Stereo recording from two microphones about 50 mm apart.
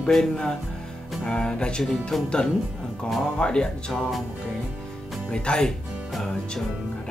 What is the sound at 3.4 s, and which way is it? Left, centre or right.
Speech, centre.